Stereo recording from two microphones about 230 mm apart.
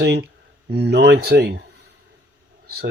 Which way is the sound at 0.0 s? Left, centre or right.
Right.